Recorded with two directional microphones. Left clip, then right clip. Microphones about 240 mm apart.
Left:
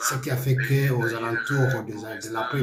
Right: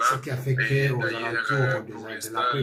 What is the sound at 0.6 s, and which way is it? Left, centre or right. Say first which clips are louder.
Speech: right 4 dB; right.